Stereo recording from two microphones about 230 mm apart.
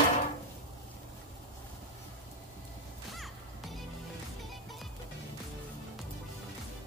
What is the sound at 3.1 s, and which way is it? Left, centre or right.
Music, centre.